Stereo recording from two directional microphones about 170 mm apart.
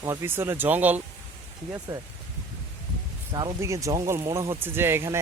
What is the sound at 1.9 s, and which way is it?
Speech, 25° right (ahead or behind).